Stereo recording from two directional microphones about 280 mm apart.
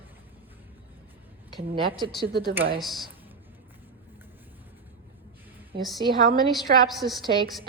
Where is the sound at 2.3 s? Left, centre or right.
Right.